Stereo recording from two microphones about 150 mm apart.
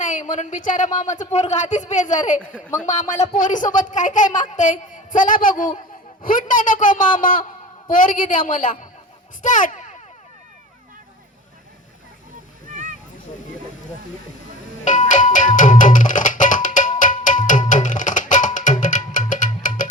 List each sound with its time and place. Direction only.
0.0 s speech: 55° left (ahead or behind)
14.8 s music: 55° left (ahead or behind)